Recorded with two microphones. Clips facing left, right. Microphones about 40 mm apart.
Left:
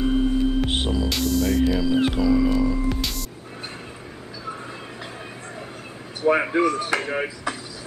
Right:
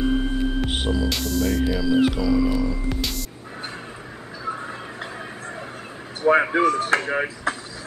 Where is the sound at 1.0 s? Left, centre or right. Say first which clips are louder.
Left 1 dB; centre.